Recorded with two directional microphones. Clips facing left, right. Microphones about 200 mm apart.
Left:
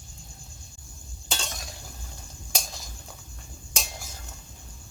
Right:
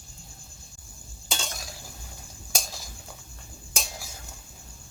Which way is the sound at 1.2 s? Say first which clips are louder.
Even; centre (ahead or behind).